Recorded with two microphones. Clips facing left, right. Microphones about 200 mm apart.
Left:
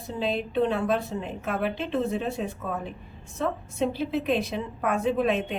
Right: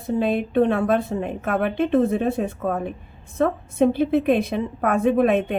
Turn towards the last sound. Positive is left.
turn(degrees=-55)  # may be behind; listen again after turning